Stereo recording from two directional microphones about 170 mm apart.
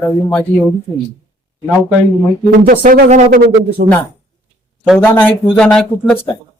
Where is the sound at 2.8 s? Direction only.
55° right (ahead or behind).